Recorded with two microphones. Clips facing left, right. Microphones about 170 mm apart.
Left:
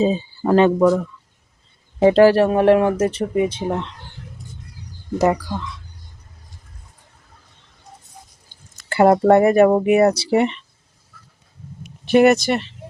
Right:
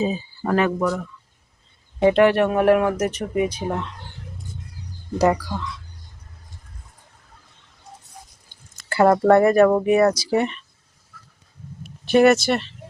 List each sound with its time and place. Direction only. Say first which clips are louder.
0.0 s speech: left 5 dB; 30° left (ahead or behind)
2.0 s speech: left 4 dB; 30° left (ahead or behind)
5.1 s speech: left 1 dB; 20° left (ahead or behind)
8.9 s speech: left 2 dB; 25° left (ahead or behind)
12.1 s speech: left 2 dB; 15° left (ahead or behind)